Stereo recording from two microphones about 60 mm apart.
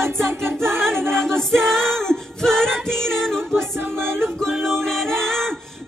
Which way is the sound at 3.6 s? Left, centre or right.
Right.